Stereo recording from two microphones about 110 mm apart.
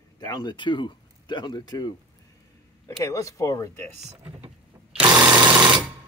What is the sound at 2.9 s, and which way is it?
Speech, 25° left (ahead or behind).